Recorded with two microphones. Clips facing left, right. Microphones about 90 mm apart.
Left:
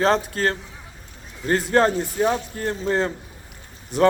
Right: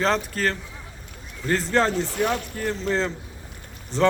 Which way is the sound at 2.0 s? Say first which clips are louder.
Left 3 dB; 70° right (ahead or behind).